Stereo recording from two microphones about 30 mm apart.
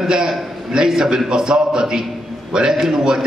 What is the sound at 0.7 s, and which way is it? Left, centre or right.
A man's voice, centre.